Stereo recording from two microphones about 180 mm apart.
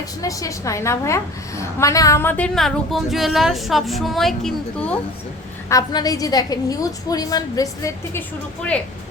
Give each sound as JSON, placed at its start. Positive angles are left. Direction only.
{"t": 0.2, "sound": "a woman's voice", "side_deg": 20}
{"t": 5.6, "sound": "a woman's voice", "side_deg": 20}